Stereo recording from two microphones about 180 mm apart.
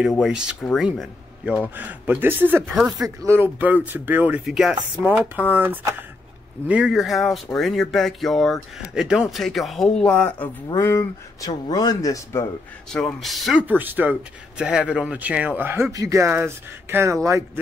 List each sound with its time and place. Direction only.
0.2 s speech: 5° right (ahead or behind); by 12.4 s 15° left (ahead or behind)
12.9 s speech: centre (ahead or behind); by 17.4 s 15° right (ahead or behind)